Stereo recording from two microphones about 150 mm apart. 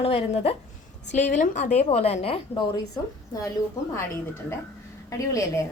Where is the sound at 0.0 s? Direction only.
40° left (ahead or behind).